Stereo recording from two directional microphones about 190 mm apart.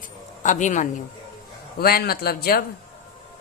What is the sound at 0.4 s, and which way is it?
Speech, 40° left (ahead or behind).